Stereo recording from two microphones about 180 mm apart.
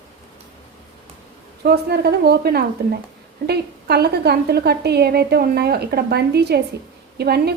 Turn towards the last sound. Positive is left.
turn(degrees=-60)  # may be behind; listen again after turning